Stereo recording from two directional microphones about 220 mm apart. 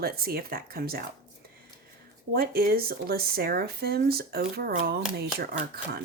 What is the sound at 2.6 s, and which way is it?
A woman's voice, 45° right (ahead or behind).